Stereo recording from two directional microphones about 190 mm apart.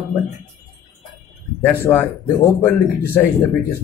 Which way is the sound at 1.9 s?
20° left (ahead or behind).